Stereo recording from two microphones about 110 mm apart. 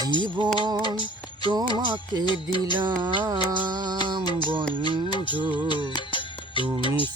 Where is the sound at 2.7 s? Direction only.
45° right (ahead or behind).